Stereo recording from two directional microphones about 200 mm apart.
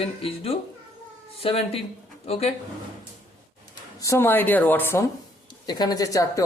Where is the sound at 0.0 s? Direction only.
30° left (ahead or behind).